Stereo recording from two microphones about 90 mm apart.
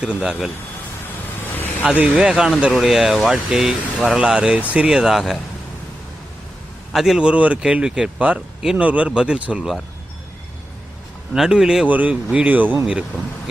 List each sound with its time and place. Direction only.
0.0 s speech: 10° right (ahead or behind)
1.5 s vehicle: 20° left (ahead or behind)
1.8 s speech: 15° right (ahead or behind)
6.9 s speech: 5° right (ahead or behind)
11.3 s speech: 5° right (ahead or behind)
11.9 s speech: 15° right (ahead or behind)